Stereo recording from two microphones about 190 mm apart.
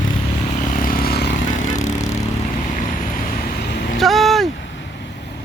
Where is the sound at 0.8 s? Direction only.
55° left (ahead or behind).